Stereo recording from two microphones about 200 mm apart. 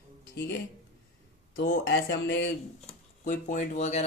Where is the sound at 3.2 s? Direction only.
40° left (ahead or behind).